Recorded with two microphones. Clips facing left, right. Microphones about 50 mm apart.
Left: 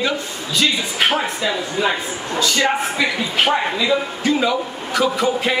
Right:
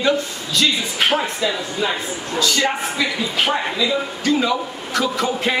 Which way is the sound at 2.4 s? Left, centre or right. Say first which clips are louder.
Left 1 dB; centre.